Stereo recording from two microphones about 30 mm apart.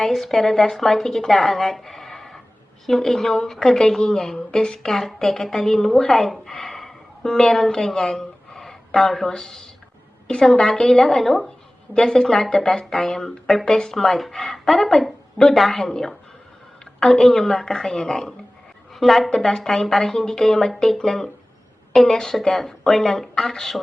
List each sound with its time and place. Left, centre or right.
0.1 s a woman's voice: centre
1.3 s a sound: centre
2.8 s a woman's voice: centre
4.9 s a woman's voice: centre
6.5 s gasp: centre
7.2 s speech: centre
8.1 s a sound: centre
10.2 s a woman's voice: left
11.9 s a woman's voice: left
18.9 s a woman's voice: centre
19.3 s a woman's voice: centre
22.1 s a woman's voice: left